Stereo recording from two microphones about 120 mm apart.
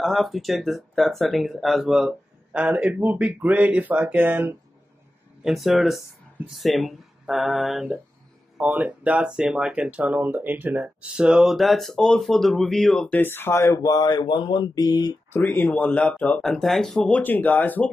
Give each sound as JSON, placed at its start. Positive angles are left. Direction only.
{"t": 0.0, "sound": "speech", "side_deg": 0}
{"t": 5.4, "sound": "speech", "side_deg": 0}
{"t": 13.2, "sound": "speech", "side_deg": 20}
{"t": 15.3, "sound": "speech", "side_deg": 15}